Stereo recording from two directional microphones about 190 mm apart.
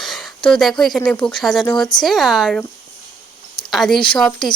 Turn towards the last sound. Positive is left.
turn(degrees=5)  # may be behind; listen again after turning